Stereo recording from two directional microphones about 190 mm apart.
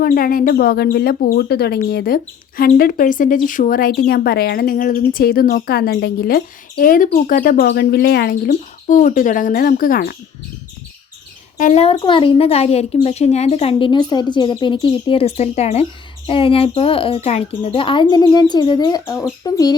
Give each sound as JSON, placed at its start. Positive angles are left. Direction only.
{"t": 0.0, "sound": "speech", "side_deg": 50}
{"t": 8.4, "sound": "speech", "side_deg": 40}
{"t": 11.5, "sound": "speech", "side_deg": 40}